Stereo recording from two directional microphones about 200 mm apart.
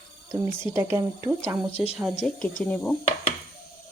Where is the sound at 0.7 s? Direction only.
15° right (ahead or behind).